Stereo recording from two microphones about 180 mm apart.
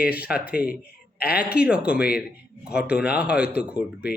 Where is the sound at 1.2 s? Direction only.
60° left (ahead or behind).